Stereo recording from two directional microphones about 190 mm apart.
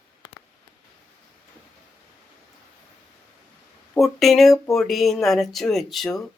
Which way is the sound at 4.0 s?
Centre (ahead or behind).